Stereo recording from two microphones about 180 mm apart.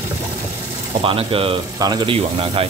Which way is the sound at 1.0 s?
30° right (ahead or behind).